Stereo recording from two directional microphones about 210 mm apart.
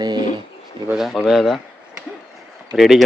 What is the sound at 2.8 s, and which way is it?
Speech, centre (ahead or behind).